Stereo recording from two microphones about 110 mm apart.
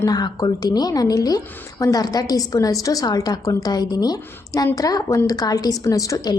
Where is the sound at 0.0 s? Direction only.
35° left (ahead or behind).